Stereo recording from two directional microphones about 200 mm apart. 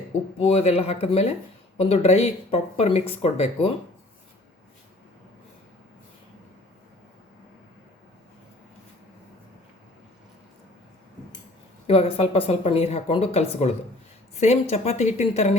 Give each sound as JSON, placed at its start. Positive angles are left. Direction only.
{"t": 0.3, "sound": "speech", "side_deg": 30}
{"t": 11.9, "sound": "speech", "side_deg": 30}